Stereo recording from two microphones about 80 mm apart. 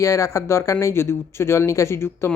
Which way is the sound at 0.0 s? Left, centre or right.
Left.